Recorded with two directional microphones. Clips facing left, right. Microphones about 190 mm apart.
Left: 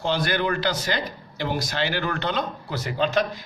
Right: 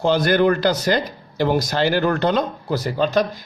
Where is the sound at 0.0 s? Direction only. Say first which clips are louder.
Right 8 dB; 45° right (ahead or behind).